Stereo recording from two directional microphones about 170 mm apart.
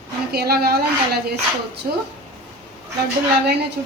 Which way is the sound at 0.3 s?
65° right (ahead or behind).